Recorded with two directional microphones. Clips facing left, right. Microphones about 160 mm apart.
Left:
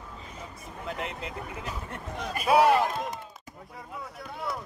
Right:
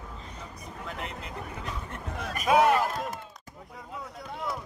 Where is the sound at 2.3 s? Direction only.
35° left (ahead or behind).